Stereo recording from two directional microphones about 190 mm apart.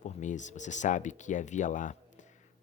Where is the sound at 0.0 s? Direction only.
40° left (ahead or behind).